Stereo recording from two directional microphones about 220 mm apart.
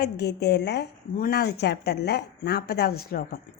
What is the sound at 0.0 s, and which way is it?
A woman's voice, 50° left (ahead or behind).